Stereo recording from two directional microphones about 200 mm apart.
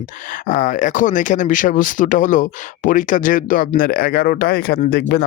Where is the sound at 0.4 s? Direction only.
40° left (ahead or behind).